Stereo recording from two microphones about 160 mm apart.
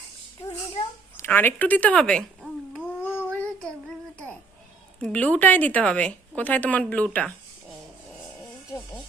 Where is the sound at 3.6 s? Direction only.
5° left (ahead or behind).